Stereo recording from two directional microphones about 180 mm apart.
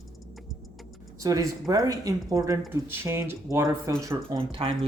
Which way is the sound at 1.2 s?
20° right (ahead or behind).